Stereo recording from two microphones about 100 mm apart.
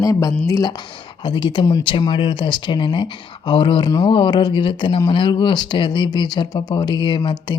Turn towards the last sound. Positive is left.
turn(degrees=50)  # may be behind; listen again after turning